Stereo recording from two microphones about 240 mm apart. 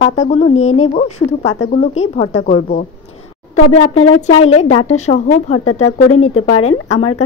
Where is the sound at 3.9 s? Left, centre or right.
Left.